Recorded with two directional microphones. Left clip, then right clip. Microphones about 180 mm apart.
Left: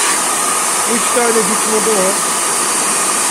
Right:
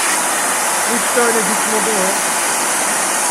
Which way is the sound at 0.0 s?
15° left (ahead or behind).